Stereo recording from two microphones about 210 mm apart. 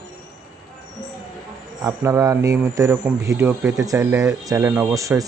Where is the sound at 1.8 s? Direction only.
15° right (ahead or behind).